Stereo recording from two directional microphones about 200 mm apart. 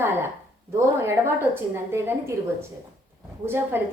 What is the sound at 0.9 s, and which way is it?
A woman's voice, 10° right (ahead or behind).